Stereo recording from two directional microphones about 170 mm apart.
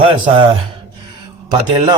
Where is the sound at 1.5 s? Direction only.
25° right (ahead or behind).